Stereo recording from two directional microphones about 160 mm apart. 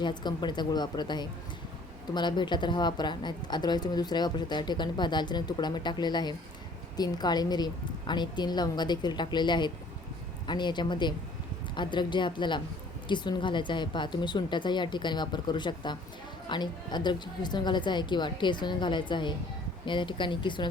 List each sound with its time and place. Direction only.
0.0 s a woman's voice: 30° left (ahead or behind)